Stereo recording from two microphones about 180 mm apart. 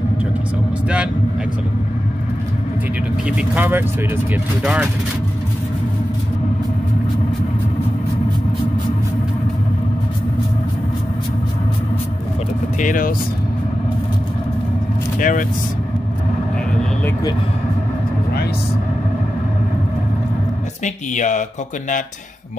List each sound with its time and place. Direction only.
3.3 s speech: 10° right (ahead or behind)
12.7 s speech: 45° left (ahead or behind)
15.1 s speech: 50° left (ahead or behind)
20.8 s speech: 45° left (ahead or behind)